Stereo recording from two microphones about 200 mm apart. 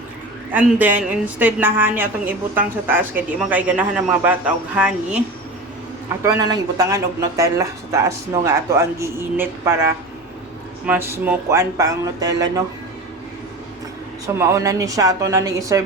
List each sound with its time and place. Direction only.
0.5 s speech: 10° right (ahead or behind)
6.2 s speech: 15° right (ahead or behind)
10.8 s speech: 10° right (ahead or behind)
14.3 s speech: 15° right (ahead or behind)